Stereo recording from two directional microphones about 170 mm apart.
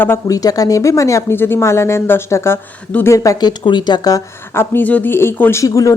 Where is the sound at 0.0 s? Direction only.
15° left (ahead or behind).